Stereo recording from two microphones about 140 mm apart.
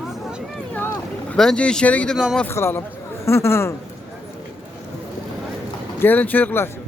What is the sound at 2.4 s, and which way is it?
Speech, 15° left (ahead or behind).